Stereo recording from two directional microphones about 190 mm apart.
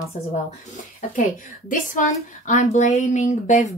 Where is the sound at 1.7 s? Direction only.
45° left (ahead or behind).